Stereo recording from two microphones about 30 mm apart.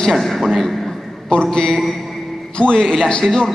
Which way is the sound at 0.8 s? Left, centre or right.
Left.